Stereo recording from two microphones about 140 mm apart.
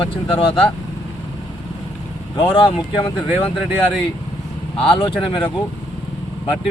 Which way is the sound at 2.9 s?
35° left (ahead or behind).